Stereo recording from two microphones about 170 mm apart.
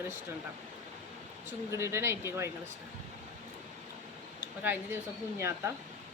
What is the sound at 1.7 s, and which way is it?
Speech, 15° right (ahead or behind).